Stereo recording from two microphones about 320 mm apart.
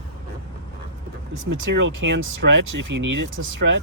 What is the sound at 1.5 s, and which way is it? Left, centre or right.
Speech, right.